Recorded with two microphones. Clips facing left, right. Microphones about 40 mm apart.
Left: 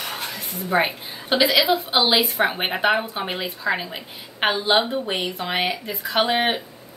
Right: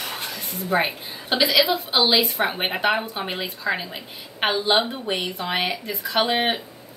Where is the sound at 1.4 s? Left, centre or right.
Centre.